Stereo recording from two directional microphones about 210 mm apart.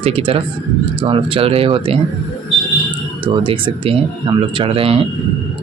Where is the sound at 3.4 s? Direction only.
25° right (ahead or behind).